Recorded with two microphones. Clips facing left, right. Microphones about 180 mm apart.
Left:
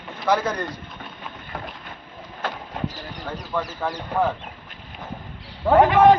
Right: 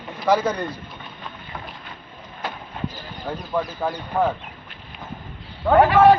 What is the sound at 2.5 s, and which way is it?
Clip-clop, 80° left.